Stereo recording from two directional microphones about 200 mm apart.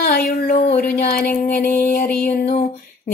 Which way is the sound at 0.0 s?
50° left (ahead or behind).